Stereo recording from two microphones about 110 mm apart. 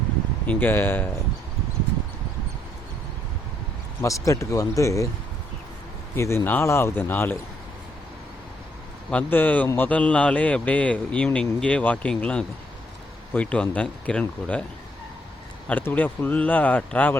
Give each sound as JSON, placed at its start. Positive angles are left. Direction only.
{"t": 0.4, "sound": "speech", "side_deg": 20}
{"t": 4.3, "sound": "speech", "side_deg": 30}
{"t": 6.1, "sound": "speech", "side_deg": 25}
{"t": 9.0, "sound": "a man's voice", "side_deg": 15}
{"t": 15.8, "sound": "a man's voice", "side_deg": 20}